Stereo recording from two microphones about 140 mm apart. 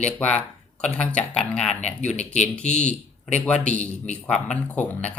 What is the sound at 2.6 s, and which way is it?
Speech, 55° left (ahead or behind).